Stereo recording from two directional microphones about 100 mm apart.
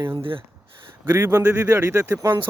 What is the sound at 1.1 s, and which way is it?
Speech, 25° right (ahead or behind).